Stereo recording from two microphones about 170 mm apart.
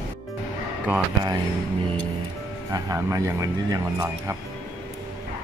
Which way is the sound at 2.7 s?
20° right (ahead or behind).